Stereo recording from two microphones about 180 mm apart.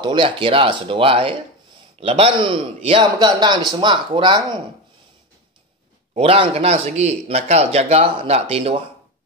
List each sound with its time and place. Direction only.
0.0 s speech: 25° right (ahead or behind)
6.1 s speech: 30° right (ahead or behind)